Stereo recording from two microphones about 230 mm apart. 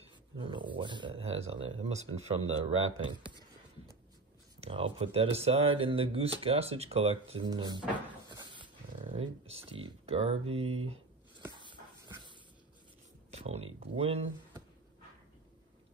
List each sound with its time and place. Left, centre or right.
0.0 s a sound: right
0.7 s speech: centre
4.6 s speech: right
8.3 s dog: centre
9.1 s speech: right
11.6 s dog: centre
13.3 s a sound: right
13.7 s speech: right